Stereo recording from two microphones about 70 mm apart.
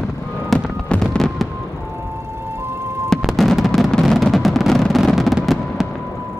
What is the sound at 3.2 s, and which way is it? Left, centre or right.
Music, centre.